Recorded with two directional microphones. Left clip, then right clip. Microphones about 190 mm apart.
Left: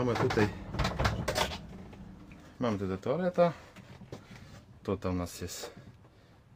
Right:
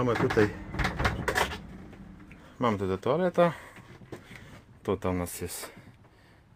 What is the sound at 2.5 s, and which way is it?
Speech, 10° right (ahead or behind).